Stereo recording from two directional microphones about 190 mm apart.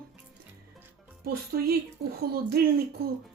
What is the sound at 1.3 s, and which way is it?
Speech, 55° right (ahead or behind).